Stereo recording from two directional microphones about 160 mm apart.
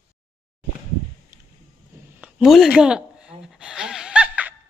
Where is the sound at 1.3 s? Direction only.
20° right (ahead or behind).